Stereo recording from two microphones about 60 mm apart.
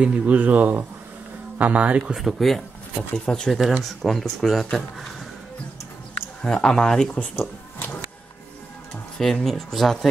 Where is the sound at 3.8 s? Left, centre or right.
Centre.